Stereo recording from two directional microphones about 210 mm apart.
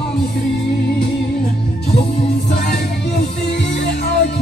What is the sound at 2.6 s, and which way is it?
Music, 50° left (ahead or behind).